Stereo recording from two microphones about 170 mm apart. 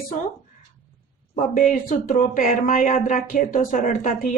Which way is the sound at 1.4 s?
55° left (ahead or behind).